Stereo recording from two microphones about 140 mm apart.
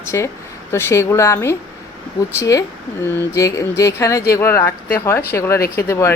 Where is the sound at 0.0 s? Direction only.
20° left (ahead or behind).